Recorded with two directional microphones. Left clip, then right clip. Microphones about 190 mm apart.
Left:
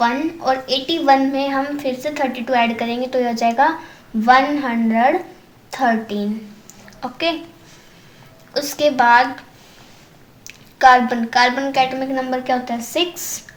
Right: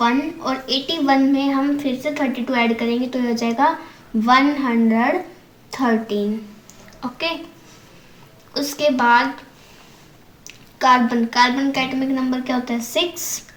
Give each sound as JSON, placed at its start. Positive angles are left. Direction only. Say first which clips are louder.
{"t": 0.0, "sound": "a woman's voice", "louder": "left 2 dB", "side_deg": 40}
{"t": 8.5, "sound": "a woman's voice", "louder": "left 3 dB", "side_deg": 45}
{"t": 10.4, "sound": "a woman's voice", "louder": "left 5 dB", "side_deg": 45}